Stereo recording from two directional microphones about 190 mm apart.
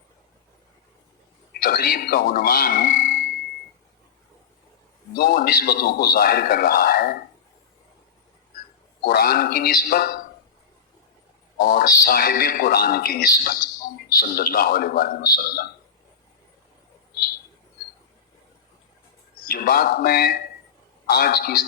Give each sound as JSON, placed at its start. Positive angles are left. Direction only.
{"t": 1.5, "sound": "a man's voice", "side_deg": 55}
{"t": 5.1, "sound": "a man's voice", "side_deg": 55}
{"t": 9.0, "sound": "a man's voice", "side_deg": 55}
{"t": 11.5, "sound": "a man's voice", "side_deg": 50}
{"t": 19.5, "sound": "a man's voice", "side_deg": 50}